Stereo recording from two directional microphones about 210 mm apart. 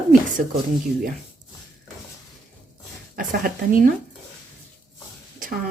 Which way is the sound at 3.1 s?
40° right (ahead or behind).